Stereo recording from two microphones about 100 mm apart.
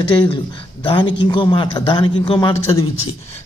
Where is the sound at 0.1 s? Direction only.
60° left (ahead or behind).